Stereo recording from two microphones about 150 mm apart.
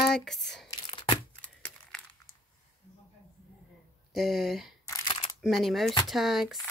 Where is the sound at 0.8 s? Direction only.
35° left (ahead or behind).